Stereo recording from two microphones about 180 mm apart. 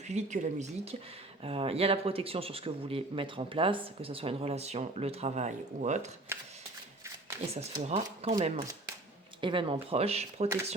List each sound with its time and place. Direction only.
0.1 s speech: 40° right (ahead or behind)
6.3 s shuffling cards: 15° right (ahead or behind)
7.4 s speech: 35° right (ahead or behind)